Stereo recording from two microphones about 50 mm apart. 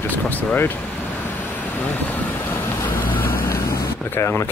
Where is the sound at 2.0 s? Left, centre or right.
Left.